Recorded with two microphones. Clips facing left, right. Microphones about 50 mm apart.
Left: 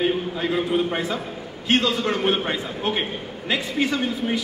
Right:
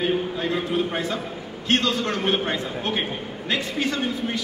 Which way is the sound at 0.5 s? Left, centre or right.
Centre.